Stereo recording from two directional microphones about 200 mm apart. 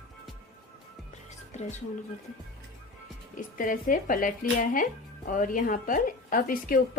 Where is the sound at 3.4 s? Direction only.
40° left (ahead or behind).